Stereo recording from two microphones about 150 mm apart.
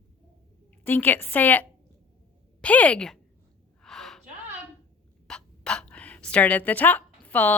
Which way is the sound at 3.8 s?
5° left (ahead or behind).